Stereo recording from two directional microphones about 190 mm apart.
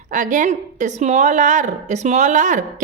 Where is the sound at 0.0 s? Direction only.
40° right (ahead or behind).